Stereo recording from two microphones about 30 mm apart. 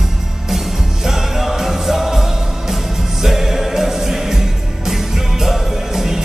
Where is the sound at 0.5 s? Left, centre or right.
Centre.